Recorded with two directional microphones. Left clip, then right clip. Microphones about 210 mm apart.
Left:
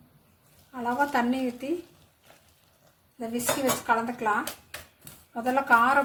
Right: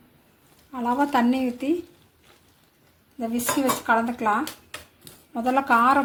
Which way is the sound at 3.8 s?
30° right (ahead or behind).